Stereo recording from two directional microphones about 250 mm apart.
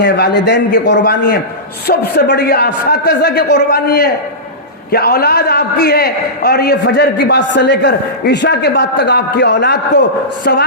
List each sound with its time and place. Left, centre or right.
0.0 s a man's voice: left